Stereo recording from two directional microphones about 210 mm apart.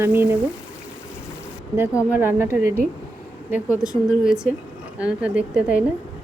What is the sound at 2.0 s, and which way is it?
Speech, 10° right (ahead or behind).